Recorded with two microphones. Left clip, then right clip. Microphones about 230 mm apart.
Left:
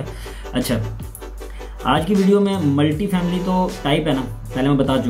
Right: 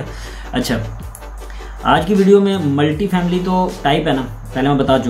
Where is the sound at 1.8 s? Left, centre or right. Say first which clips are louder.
Right 5 dB; centre.